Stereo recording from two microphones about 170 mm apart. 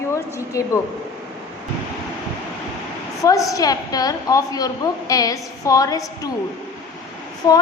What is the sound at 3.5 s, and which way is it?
A woman's voice, 20° left (ahead or behind).